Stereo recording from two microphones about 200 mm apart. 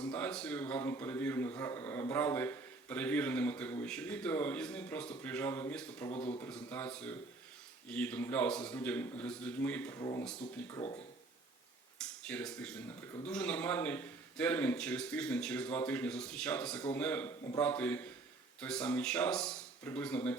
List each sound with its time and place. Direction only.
0.1 s a man's voice: 5° left (ahead or behind)
6.1 s a man's voice: 30° left (ahead or behind)
6.4 s a man's voice: 10° left (ahead or behind)
11.9 s a man's voice: 5° left (ahead or behind)